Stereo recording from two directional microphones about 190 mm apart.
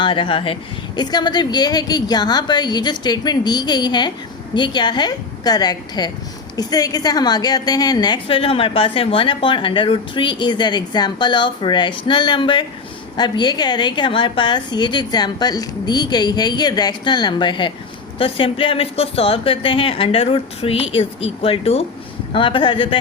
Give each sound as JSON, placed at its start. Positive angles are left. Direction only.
{"t": 0.0, "sound": "a woman's voice", "side_deg": 25}